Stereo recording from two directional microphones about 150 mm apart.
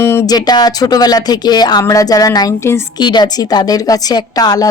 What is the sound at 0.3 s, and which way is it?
A woman's voice, 25° left (ahead or behind).